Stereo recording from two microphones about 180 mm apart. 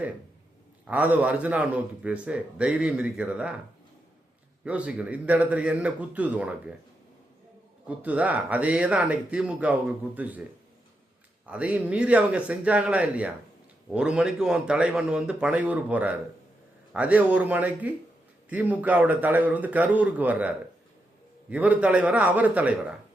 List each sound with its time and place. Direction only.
0.9 s a man's voice: 10° right (ahead or behind)
4.6 s a man's voice: 5° right (ahead or behind)
7.9 s a man's voice: 10° right (ahead or behind)
11.4 s a man's voice: 5° right (ahead or behind)
21.5 s a man's voice: 10° right (ahead or behind)